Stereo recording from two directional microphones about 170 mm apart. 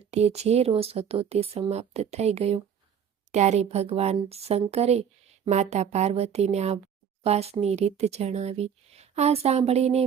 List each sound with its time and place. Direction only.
0.1 s speech: 40° right (ahead or behind)